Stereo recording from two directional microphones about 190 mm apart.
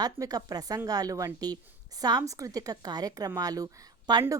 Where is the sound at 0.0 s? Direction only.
20° right (ahead or behind).